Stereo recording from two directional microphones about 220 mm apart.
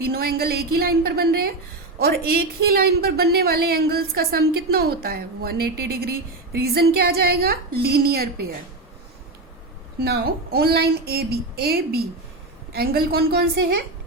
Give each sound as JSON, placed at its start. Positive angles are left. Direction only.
{"t": 0.0, "sound": "a woman's voice", "side_deg": -45}
{"t": 10.0, "sound": "a woman's voice", "side_deg": -45}